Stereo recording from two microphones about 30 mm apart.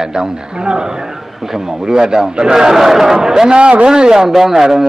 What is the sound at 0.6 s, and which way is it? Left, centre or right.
Speech, right.